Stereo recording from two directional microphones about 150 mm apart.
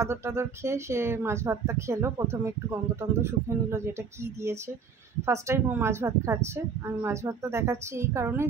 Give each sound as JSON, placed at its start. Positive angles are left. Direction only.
{"t": 0.0, "sound": "speech", "side_deg": -20}